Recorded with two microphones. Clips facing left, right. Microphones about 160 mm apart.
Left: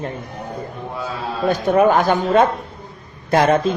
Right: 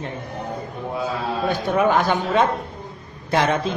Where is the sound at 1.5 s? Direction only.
45° left (ahead or behind).